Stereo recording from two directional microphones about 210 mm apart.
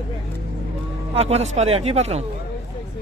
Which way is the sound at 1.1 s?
30° right (ahead or behind).